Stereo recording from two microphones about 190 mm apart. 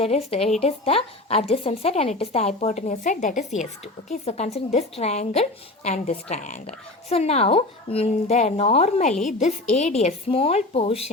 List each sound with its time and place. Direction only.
0.0 s a woman's voice: 30° left (ahead or behind)